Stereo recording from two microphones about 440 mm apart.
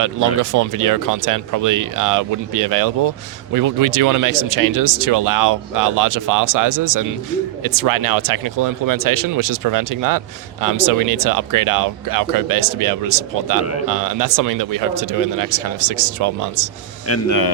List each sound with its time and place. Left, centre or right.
0.0 s speech: right
17.1 s speech: left